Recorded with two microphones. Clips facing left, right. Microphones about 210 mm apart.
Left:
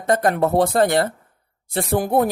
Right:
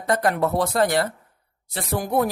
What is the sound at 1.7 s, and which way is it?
Speech, 55° left (ahead or behind).